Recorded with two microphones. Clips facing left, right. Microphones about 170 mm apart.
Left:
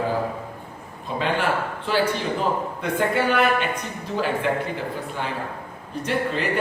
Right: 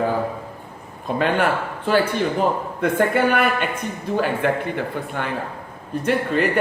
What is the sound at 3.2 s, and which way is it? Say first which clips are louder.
A woman's voice: right 2 dB; 55° right (ahead or behind).